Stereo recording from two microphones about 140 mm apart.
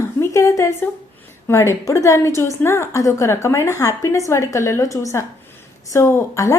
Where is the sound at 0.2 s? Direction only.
20° left (ahead or behind).